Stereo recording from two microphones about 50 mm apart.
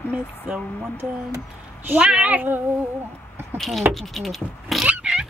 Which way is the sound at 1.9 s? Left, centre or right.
Right.